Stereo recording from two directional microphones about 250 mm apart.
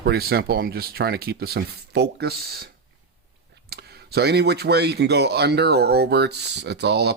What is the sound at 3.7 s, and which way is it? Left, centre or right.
Speech, right.